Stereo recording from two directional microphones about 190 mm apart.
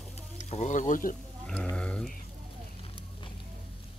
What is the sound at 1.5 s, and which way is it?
Speech, 5° left (ahead or behind).